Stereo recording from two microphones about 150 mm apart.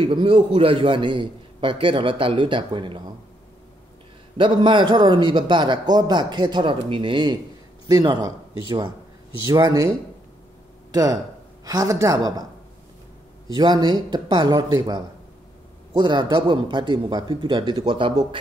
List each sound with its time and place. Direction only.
0.0 s a man's voice: 35° right (ahead or behind)
4.4 s a man's voice: 30° right (ahead or behind)
10.9 s speech: 25° right (ahead or behind)
13.5 s a man's voice: 30° right (ahead or behind)